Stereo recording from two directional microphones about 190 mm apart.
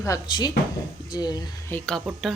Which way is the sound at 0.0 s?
20° left (ahead or behind).